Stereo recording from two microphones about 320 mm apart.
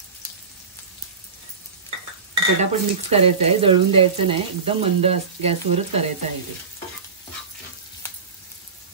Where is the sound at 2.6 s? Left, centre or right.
Centre.